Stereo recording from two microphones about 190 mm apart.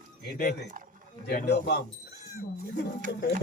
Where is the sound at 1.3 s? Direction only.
55° left (ahead or behind).